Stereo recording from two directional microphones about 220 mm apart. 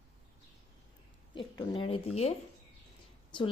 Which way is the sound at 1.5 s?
20° left (ahead or behind).